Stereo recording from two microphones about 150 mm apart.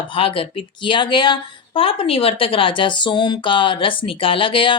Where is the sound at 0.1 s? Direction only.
35° left (ahead or behind).